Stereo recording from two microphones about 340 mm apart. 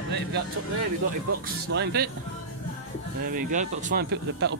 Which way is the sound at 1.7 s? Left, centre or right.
Right.